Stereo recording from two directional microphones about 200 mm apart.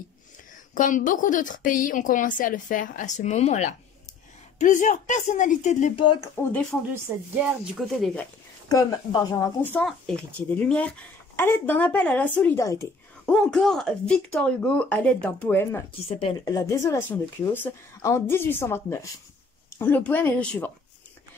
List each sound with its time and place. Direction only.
0.7 s a woman's voice: 40° left (ahead or behind)
6.2 s speech: 10° left (ahead or behind)
7.8 s speech: centre (ahead or behind)
8.6 s speech: 20° left (ahead or behind)
13.2 s speech: 5° left (ahead or behind)
16.1 s speech: 30° left (ahead or behind)
16.4 s speech: 15° left (ahead or behind)